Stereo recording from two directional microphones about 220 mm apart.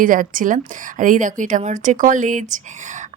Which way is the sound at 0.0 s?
40° right (ahead or behind).